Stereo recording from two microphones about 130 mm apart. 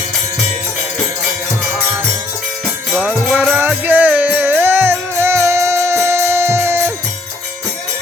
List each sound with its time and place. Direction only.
2.9 s music: centre (ahead or behind)
3.5 s music: 15° right (ahead or behind)